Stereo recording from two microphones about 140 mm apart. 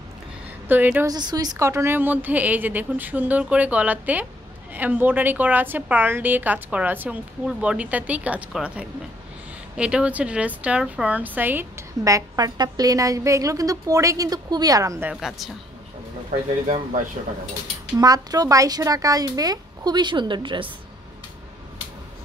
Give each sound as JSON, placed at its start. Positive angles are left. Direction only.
{"t": 0.7, "sound": "a woman's voice", "side_deg": -10}
{"t": 1.0, "sound": "a woman's voice", "side_deg": -25}
{"t": 15.0, "sound": "a woman's voice", "side_deg": 0}
{"t": 17.9, "sound": "a woman's voice", "side_deg": -25}